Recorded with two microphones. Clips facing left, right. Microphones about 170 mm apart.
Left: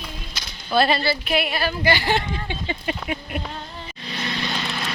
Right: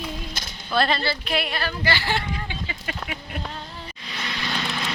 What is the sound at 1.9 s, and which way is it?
Speech, 15° left (ahead or behind).